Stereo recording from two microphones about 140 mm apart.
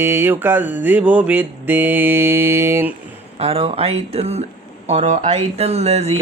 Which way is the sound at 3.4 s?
45° right (ahead or behind).